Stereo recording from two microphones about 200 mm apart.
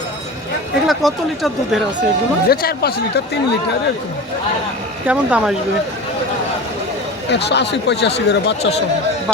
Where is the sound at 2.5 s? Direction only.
50° left (ahead or behind).